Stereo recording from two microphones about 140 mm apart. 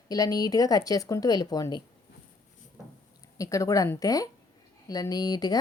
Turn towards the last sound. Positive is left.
turn(degrees=30)  # may be behind; listen again after turning